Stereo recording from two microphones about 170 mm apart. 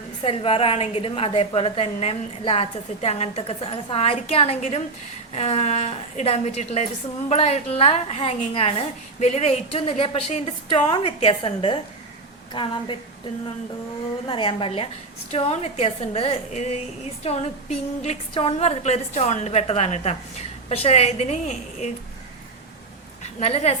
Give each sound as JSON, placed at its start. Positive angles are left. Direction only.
{"t": 0.2, "sound": "a woman's voice", "side_deg": 35}
{"t": 14.3, "sound": "a woman's voice", "side_deg": 30}
{"t": 23.2, "sound": "a woman's voice", "side_deg": 40}